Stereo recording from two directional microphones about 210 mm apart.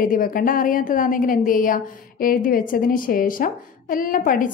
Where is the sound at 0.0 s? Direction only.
40° left (ahead or behind).